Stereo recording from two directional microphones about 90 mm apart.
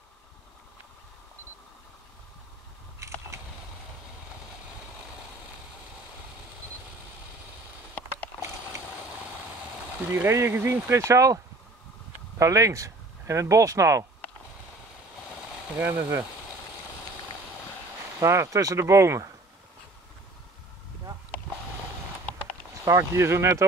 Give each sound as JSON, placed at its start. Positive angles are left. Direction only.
{"t": 10.1, "sound": "speech", "side_deg": -25}
{"t": 15.8, "sound": "speech", "side_deg": -20}
{"t": 18.2, "sound": "speech", "side_deg": -30}
{"t": 21.3, "sound": "a sound", "side_deg": 15}
{"t": 22.8, "sound": "speech", "side_deg": -30}